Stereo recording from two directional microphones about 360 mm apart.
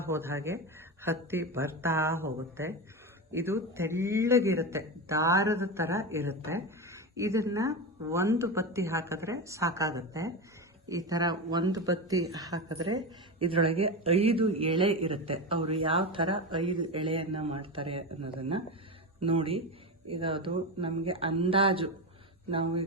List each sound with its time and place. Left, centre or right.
0.1 s speech: centre
12.7 s speech: right
13.4 s speech: centre
19.2 s speech: centre